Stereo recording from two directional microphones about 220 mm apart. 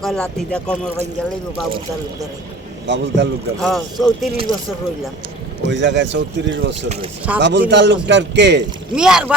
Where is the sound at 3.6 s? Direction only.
Centre (ahead or behind).